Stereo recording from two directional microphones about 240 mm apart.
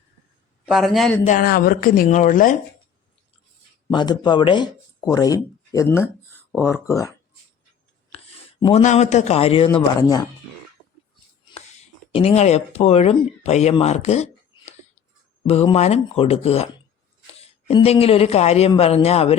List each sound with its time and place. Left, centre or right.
0.6 s a man's voice: centre
1.2 s speech: left
3.9 s speech: centre
8.6 s speech: left
12.1 s speech: left